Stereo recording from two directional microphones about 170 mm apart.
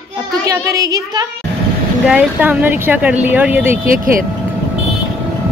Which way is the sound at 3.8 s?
55° right (ahead or behind).